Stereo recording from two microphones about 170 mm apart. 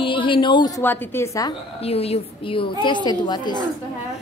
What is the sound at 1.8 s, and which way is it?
A woman's voice, 35° left (ahead or behind).